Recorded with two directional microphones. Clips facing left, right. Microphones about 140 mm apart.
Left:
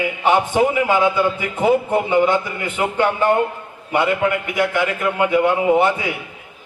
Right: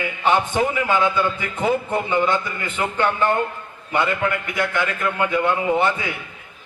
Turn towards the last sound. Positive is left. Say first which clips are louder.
# left 4 dB
turn(degrees=15)  # may be behind; listen again after turning